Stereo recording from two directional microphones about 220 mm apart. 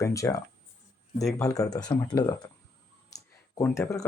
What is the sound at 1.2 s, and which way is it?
Speech, centre (ahead or behind).